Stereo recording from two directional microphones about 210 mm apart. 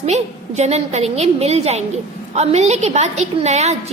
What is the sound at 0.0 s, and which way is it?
A woman's voice, 30° right (ahead or behind).